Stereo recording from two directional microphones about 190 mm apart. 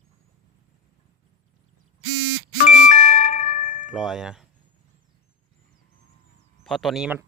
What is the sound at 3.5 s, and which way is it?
Tubular bells, 40° left (ahead or behind).